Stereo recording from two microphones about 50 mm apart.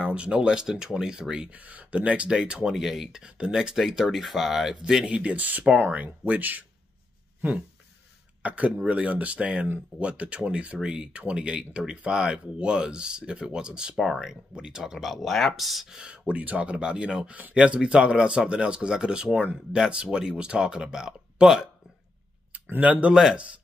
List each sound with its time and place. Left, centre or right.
0.0 s speech: right
1.5 s speech: right
2.3 s speech: centre
3.5 s speech: centre
5.0 s speech: right
8.4 s speech: right
13.9 s speech: centre
14.2 s speech: centre
16.0 s speech: right
22.8 s speech: right